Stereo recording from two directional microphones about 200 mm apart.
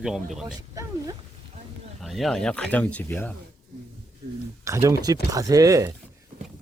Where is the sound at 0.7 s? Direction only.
15° right (ahead or behind).